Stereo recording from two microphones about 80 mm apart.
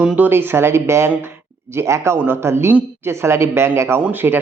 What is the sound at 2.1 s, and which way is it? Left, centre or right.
Speech, right.